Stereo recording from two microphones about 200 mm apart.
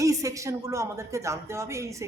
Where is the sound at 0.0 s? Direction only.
15° right (ahead or behind).